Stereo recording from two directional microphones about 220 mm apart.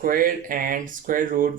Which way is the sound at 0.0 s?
40° right (ahead or behind).